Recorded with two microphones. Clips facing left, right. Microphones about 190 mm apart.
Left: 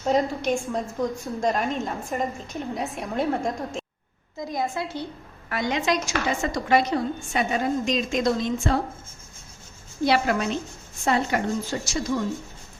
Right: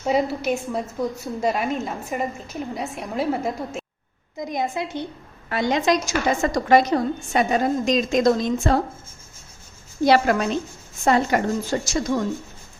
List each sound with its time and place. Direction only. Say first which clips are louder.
0.0 s a woman's voice: right 1 dB; 10° right (ahead or behind)
4.4 s a woman's voice: right 2 dB; 20° right (ahead or behind)
5.5 s a woman's voice: right 4 dB; 30° right (ahead or behind)
10.0 s a woman's voice: right 4 dB; 40° right (ahead or behind)